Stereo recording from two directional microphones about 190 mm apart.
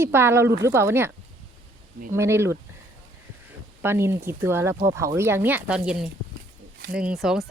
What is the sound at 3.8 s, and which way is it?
Speech, 10° right (ahead or behind).